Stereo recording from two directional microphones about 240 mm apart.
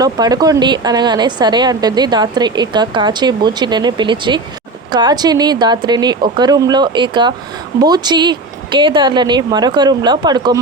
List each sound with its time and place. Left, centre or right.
0.0 s speech: centre